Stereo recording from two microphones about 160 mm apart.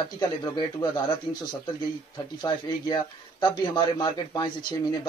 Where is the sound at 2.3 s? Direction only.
25° left (ahead or behind).